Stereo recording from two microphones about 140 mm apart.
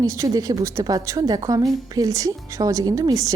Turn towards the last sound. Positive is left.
turn(degrees=-25)  # may be behind; listen again after turning